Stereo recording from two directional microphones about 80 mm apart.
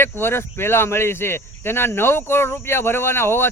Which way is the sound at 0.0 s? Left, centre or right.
Left.